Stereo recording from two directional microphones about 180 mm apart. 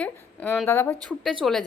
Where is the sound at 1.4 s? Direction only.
Centre (ahead or behind).